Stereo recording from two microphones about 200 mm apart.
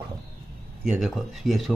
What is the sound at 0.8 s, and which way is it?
Speech, centre (ahead or behind).